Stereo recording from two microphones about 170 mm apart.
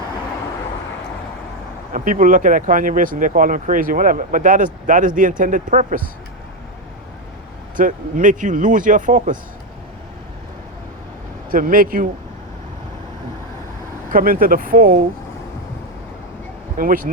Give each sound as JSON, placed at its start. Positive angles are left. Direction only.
{"t": 1.9, "sound": "speech", "side_deg": -50}
{"t": 7.8, "sound": "speech", "side_deg": -50}
{"t": 11.5, "sound": "speech", "side_deg": -55}
{"t": 14.1, "sound": "speech", "side_deg": -55}
{"t": 16.7, "sound": "speech", "side_deg": -55}